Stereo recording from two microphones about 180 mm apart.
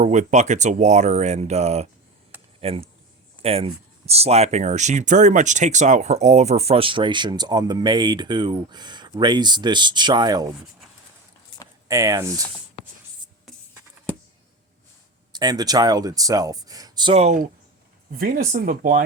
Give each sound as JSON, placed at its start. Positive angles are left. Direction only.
{"t": 0.0, "sound": "speech", "side_deg": -40}
{"t": 11.9, "sound": "speech", "side_deg": -20}
{"t": 15.3, "sound": "speech", "side_deg": -25}
{"t": 18.2, "sound": "speech", "side_deg": -50}